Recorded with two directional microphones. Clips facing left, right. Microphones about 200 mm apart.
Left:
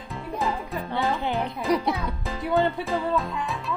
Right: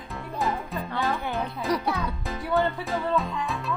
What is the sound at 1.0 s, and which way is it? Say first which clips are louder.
Speech: left 2 dB; 15° left (ahead or behind).